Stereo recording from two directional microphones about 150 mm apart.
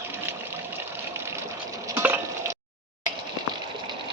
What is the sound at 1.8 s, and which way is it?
Stir, 15° right (ahead or behind).